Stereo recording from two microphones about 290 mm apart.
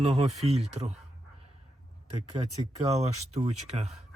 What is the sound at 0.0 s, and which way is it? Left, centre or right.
Speech, right.